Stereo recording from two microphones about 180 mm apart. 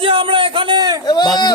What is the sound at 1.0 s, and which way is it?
Speech, 25° left (ahead or behind).